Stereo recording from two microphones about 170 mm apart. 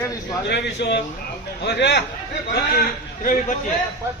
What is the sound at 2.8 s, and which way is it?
Speech, 55° left (ahead or behind).